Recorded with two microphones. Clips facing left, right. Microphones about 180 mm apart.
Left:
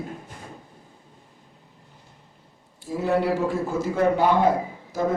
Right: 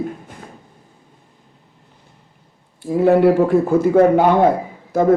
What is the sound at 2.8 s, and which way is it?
A man's voice, 55° right (ahead or behind).